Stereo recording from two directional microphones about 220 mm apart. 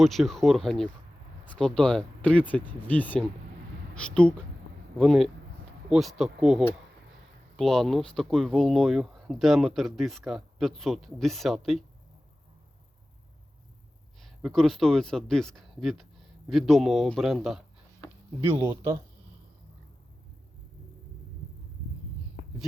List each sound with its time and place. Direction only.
0.0 s speech: centre (ahead or behind)
14.2 s speech: centre (ahead or behind)
18.5 s speech: 15° right (ahead or behind)